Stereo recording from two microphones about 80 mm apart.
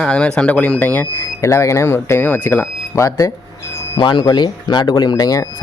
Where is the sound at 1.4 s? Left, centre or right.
Left.